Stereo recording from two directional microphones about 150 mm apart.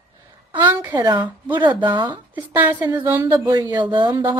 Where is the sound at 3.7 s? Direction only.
30° right (ahead or behind).